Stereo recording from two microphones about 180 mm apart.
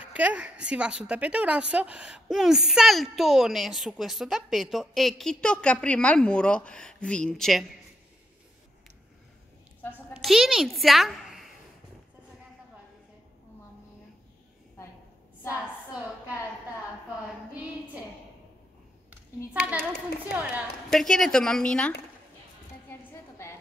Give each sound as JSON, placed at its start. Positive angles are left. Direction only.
{"t": 0.0, "sound": "a woman's voice", "side_deg": -10}
{"t": 10.1, "sound": "a woman's voice", "side_deg": 0}
{"t": 15.6, "sound": "a sound", "side_deg": -5}
{"t": 19.6, "sound": "a woman's voice", "side_deg": -5}
{"t": 20.9, "sound": "a woman's voice", "side_deg": 0}
{"t": 22.8, "sound": "a sound", "side_deg": 15}